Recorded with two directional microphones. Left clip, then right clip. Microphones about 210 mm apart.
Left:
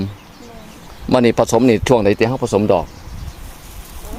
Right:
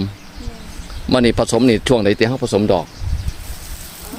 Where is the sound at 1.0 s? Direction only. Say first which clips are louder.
Left 2 dB; 15° left (ahead or behind).